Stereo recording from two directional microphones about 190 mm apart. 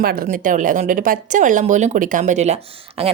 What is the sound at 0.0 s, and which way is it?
A woman's voice, 50° right (ahead or behind).